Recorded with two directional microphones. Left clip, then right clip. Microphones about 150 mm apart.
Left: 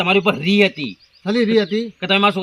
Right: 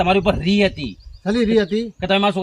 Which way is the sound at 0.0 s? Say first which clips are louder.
Left 1 dB; 70° right (ahead or behind).